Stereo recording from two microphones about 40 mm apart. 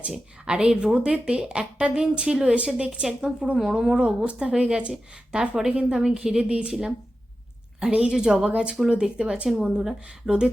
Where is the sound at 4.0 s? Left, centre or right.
Right.